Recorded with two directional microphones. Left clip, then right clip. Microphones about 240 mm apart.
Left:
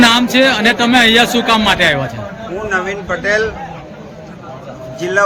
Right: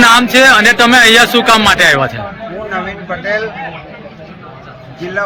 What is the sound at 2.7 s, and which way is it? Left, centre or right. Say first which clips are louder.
Speech: left 3 dB; left.